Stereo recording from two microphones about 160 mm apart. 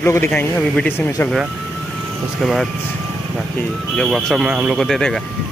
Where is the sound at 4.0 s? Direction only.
Centre (ahead or behind).